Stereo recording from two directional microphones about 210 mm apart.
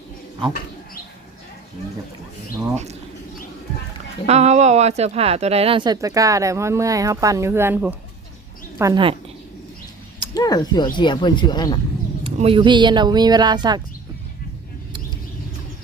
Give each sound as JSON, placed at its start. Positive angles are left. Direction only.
{"t": 4.3, "sound": "speech", "side_deg": -30}
{"t": 8.8, "sound": "speech", "side_deg": -20}
{"t": 10.3, "sound": "speech", "side_deg": 20}
{"t": 12.2, "sound": "speech", "side_deg": -25}